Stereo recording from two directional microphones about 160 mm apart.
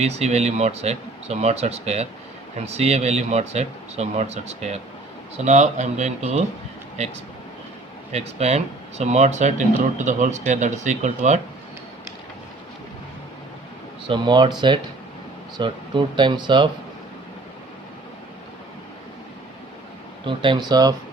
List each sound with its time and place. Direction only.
0.0 s speech: 40° right (ahead or behind)
8.1 s speech: 40° right (ahead or behind)
14.1 s speech: 30° right (ahead or behind)
15.5 s speech: 30° right (ahead or behind)
20.2 s speech: 30° right (ahead or behind)